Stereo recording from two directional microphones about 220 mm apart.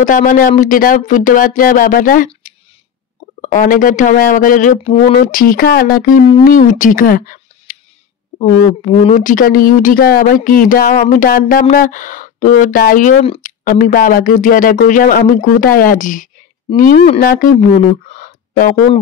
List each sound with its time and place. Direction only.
0.0 s speech: 35° left (ahead or behind)
8.9 s speech: 30° left (ahead or behind)